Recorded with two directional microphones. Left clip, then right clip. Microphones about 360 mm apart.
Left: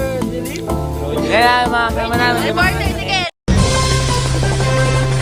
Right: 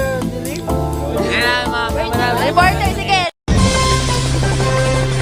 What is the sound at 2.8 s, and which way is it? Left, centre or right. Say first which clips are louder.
Music: right 3 dB; centre.